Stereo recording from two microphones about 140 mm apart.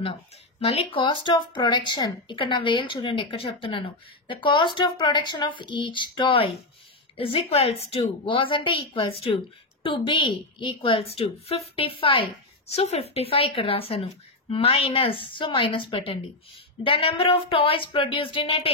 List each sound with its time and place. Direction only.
0.0 s a woman's voice: 40° left (ahead or behind)